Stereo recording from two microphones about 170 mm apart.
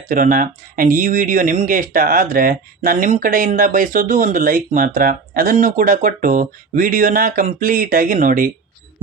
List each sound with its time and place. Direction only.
0.1 s speech: 50° right (ahead or behind)